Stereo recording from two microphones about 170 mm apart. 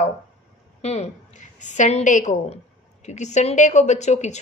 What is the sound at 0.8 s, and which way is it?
Speech, 40° left (ahead or behind).